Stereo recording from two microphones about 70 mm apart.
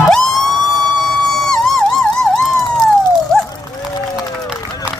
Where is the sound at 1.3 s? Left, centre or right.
Centre.